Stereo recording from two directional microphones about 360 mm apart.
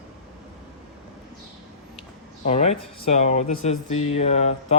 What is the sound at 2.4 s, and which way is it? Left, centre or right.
Speech, centre.